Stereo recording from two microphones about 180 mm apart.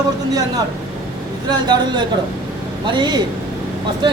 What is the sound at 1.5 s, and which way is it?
Speech, 25° right (ahead or behind).